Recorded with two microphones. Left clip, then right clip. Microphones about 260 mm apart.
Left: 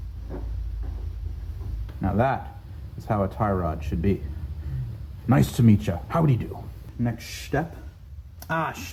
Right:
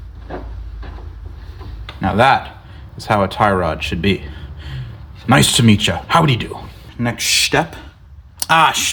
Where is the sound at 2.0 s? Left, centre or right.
Right.